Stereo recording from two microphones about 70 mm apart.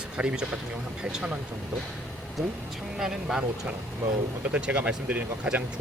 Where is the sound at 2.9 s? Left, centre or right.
Centre.